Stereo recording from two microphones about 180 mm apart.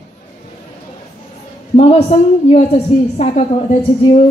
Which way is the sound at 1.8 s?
35° left (ahead or behind).